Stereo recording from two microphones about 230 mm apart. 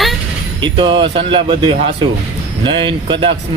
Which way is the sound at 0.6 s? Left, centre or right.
Centre.